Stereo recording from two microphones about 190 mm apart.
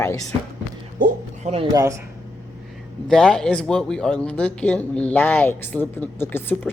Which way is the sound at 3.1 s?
5° left (ahead or behind).